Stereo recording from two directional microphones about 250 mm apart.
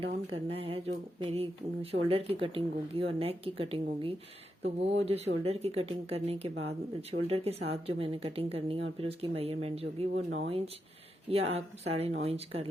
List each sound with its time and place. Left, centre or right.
0.0 s speech: right